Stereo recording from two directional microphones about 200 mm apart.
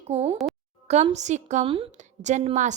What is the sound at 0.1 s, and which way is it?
A woman's voice, 30° right (ahead or behind).